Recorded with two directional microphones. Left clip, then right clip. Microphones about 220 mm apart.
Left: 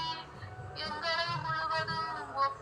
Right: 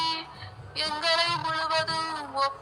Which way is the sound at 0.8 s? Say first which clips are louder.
Right 8 dB; 40° right (ahead or behind).